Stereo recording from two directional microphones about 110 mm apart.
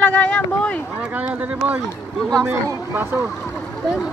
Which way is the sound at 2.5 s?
25° right (ahead or behind).